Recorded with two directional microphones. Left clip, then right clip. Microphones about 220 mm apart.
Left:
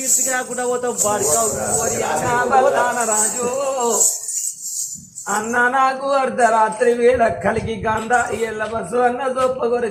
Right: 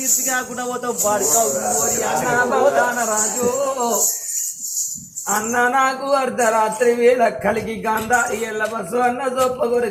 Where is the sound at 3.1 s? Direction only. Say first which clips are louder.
Left 1 dB; 40° left (ahead or behind).